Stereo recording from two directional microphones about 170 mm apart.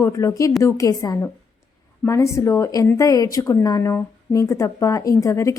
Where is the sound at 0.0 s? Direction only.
20° left (ahead or behind).